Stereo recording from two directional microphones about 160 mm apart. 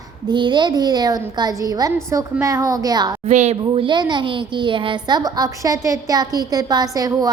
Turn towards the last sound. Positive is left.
turn(degrees=-20)  # may be behind; listen again after turning